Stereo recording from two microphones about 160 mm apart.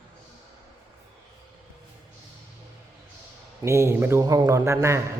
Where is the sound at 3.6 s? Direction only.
15° right (ahead or behind).